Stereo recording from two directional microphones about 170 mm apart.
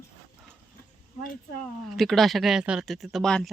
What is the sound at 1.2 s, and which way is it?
Speech, 50° left (ahead or behind).